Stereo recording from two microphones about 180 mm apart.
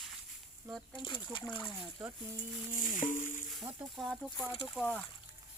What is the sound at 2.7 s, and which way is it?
Music, 45° left (ahead or behind).